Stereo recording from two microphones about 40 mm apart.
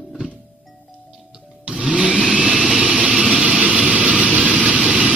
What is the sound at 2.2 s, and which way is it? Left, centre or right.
Vehicle, centre.